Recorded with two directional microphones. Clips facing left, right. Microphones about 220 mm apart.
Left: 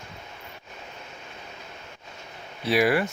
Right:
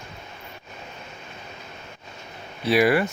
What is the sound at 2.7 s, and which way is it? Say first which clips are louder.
Speech: right 3 dB; 60° right (ahead or behind).